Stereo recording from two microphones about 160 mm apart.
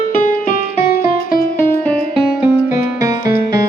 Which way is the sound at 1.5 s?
10° left (ahead or behind).